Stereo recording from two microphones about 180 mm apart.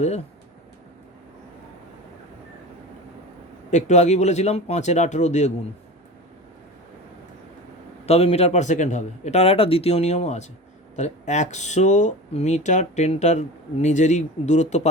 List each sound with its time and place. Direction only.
3.7 s speech: 40° left (ahead or behind)
8.0 s speech: 35° left (ahead or behind)